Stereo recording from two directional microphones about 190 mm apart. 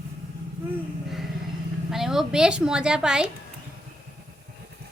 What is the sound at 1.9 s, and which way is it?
A woman's voice, centre (ahead or behind).